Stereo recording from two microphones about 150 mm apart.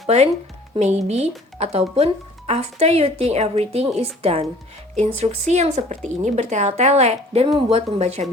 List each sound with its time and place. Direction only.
0.8 s speech: 45° right (ahead or behind)